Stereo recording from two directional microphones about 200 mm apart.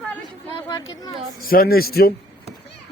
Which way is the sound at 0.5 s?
20° left (ahead or behind).